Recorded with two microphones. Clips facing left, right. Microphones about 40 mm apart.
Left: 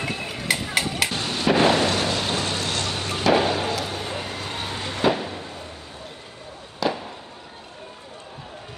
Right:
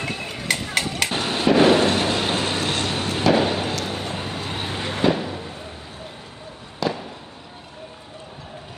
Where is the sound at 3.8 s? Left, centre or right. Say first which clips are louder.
Right 1 dB; centre.